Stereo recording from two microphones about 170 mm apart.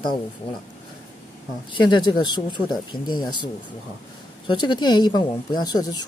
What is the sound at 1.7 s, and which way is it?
Speech, 25° left (ahead or behind).